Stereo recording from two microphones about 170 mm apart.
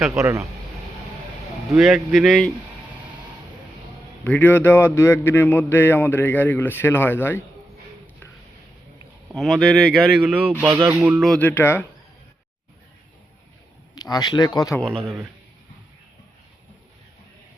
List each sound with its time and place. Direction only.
0.1 s speech: 15° right (ahead or behind)
1.7 s speech: centre (ahead or behind)
4.2 s a man's voice: 10° left (ahead or behind)
9.3 s speech: centre (ahead or behind)
11.3 s a man's voice: 10° left (ahead or behind)
13.9 s speech: 25° left (ahead or behind)
14.9 s a man's voice: 30° right (ahead or behind)